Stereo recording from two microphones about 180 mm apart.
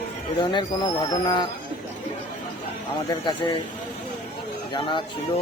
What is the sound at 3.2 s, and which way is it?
Speech, 25° left (ahead or behind).